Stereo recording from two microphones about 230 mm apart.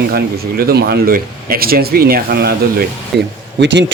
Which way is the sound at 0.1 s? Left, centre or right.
Right.